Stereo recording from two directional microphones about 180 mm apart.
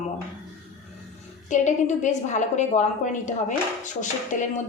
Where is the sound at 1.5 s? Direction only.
40° left (ahead or behind).